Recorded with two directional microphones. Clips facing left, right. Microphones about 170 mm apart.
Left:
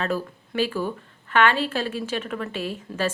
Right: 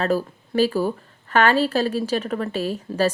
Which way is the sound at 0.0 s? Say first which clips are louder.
Right 5 dB; 40° right (ahead or behind).